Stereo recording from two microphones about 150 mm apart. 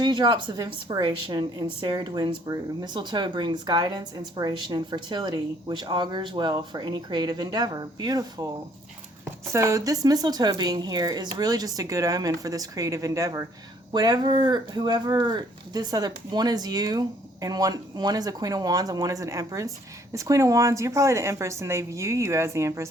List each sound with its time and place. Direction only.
0.0 s speech: 30° right (ahead or behind)